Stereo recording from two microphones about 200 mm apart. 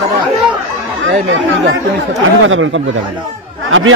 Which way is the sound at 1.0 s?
70° right (ahead or behind).